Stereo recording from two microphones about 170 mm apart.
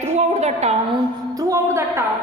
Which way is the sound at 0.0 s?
40° right (ahead or behind).